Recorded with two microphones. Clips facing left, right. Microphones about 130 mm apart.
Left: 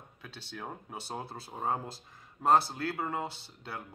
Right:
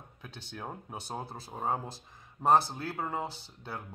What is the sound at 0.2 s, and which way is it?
Speech, 15° right (ahead or behind).